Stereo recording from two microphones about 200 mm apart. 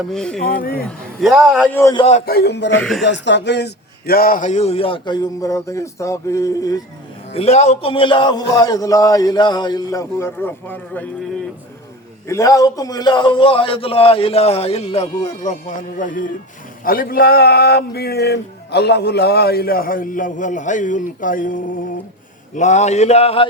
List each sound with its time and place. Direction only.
0.1 s a man's voice: 5° left (ahead or behind)
0.4 s speech: 45° left (ahead or behind)
0.9 s a man's voice: centre (ahead or behind)
1.9 s a man's voice: 25° left (ahead or behind)
2.1 s speech: 50° left (ahead or behind)
2.7 s a man's voice: 5° left (ahead or behind)
3.0 s a man's voice: 60° left (ahead or behind); by 6.8 s 15° left (ahead or behind)
7.3 s a man's voice: 30° left (ahead or behind); by 11.1 s 10° left (ahead or behind)
12.3 s a man's voice: 15° left (ahead or behind); by 21.6 s 40° left (ahead or behind)
22.5 s a sound: 35° left (ahead or behind)